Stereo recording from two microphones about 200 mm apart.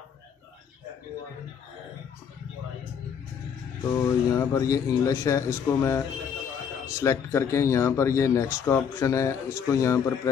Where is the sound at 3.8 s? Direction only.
15° left (ahead or behind).